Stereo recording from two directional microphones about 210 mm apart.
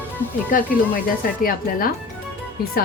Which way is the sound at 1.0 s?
45° left (ahead or behind).